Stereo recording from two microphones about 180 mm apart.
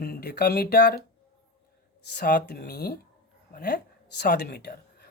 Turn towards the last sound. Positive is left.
turn(degrees=60)  # may be behind; listen again after turning